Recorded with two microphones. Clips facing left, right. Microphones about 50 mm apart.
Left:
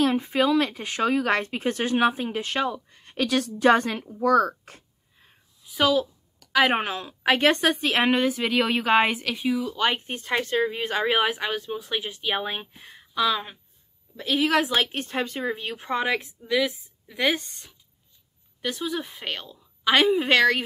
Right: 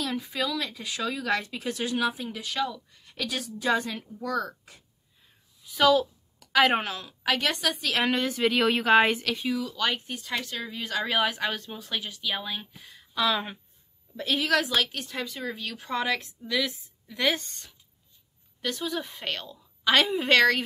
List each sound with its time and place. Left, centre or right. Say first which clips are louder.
0.0 s speech: left 8 dB; left
4.2 s a sound: left 11 dB; left
5.8 s a sound: right 1 dB; centre
6.7 s speech: left 2 dB; left
8.2 s a woman's voice: left 1 dB; centre
9.6 s speech: left 4 dB; left
13.1 s a woman's voice: left 2 dB; centre
14.4 s a woman's voice: left 3 dB; centre